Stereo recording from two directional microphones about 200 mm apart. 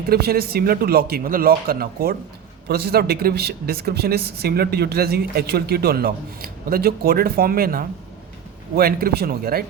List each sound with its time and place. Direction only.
0.1 s speech: 50° right (ahead or behind)